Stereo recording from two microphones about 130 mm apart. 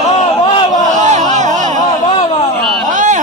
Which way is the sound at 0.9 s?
70° right (ahead or behind).